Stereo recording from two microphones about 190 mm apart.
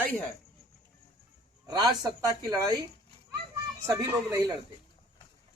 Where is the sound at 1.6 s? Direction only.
20° right (ahead or behind).